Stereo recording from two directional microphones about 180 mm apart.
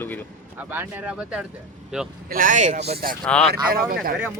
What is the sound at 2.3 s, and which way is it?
Speech, 50° right (ahead or behind).